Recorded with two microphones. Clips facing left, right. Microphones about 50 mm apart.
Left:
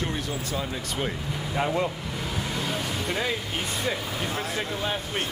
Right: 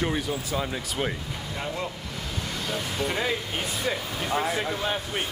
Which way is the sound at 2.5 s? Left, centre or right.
Centre.